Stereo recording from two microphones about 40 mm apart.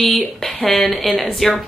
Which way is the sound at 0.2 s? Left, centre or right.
Centre.